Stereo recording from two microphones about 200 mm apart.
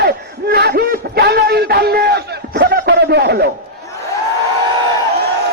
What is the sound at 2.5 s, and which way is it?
Music, 55° right (ahead or behind).